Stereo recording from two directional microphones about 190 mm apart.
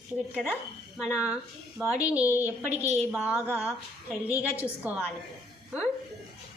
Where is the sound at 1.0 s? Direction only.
5° right (ahead or behind).